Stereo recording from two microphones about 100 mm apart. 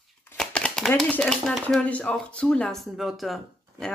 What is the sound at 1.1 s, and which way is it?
Speech, 5° left (ahead or behind).